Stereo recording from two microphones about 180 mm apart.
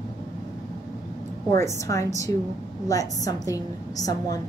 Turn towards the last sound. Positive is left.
turn(degrees=20)  # may be behind; listen again after turning